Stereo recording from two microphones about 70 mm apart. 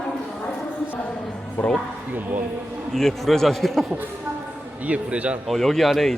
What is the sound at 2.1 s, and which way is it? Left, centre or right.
Speech, right.